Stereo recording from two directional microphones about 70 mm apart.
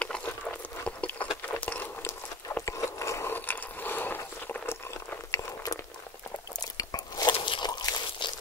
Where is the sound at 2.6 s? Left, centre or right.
Left.